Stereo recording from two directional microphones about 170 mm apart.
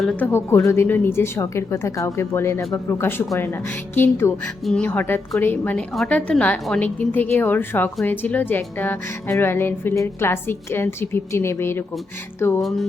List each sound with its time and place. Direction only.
0.0 s speech: 5° left (ahead or behind)